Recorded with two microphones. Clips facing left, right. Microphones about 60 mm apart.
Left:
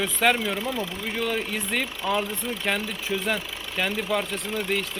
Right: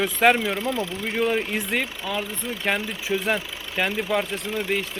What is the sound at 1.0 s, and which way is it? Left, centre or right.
Speech, centre.